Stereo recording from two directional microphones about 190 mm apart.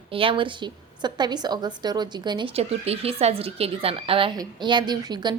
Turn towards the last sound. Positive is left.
turn(degrees=-20)  # may be behind; listen again after turning